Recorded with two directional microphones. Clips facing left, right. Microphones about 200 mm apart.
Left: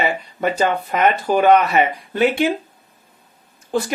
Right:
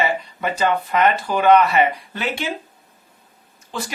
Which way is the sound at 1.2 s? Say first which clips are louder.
Left 2 dB; 50° left (ahead or behind).